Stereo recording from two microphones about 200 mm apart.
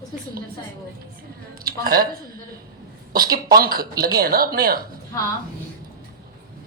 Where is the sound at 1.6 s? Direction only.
50° right (ahead or behind).